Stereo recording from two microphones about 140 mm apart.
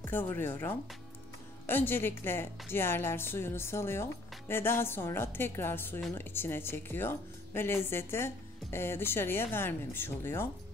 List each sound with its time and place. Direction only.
0.0 s a woman's voice: 15° left (ahead or behind)